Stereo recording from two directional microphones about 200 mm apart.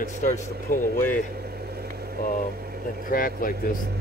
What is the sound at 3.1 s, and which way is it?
Speech, 45° left (ahead or behind).